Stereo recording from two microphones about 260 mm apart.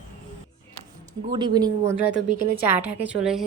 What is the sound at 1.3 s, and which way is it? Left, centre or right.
Speech, centre.